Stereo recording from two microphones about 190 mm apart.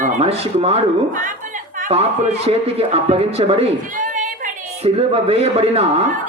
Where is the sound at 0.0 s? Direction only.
30° right (ahead or behind).